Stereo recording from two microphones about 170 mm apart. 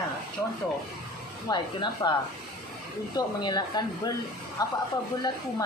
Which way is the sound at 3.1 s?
25° left (ahead or behind).